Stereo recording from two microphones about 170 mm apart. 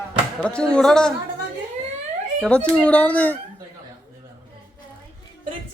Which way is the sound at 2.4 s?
5° left (ahead or behind).